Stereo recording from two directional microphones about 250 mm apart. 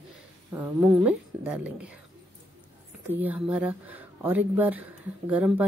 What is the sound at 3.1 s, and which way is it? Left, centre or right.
Speech, centre.